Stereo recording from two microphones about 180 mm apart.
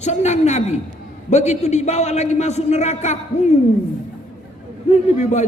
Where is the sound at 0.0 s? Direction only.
40° left (ahead or behind).